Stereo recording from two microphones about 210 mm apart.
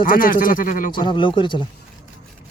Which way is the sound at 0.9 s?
25° left (ahead or behind).